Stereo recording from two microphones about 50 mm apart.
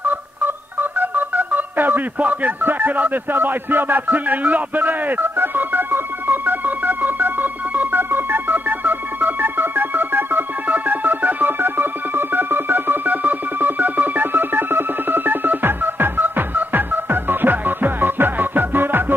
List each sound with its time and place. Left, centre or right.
0.0 s telephone dialing: right
2.6 s music: right